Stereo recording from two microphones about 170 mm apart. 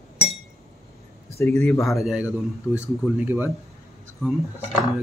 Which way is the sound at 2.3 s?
15° left (ahead or behind).